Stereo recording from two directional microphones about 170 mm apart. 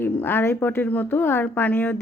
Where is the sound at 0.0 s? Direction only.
10° left (ahead or behind).